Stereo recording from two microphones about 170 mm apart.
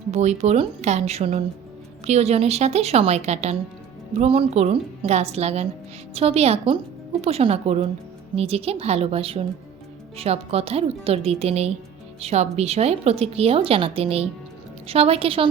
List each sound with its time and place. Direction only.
0.1 s a woman's voice: 40° right (ahead or behind)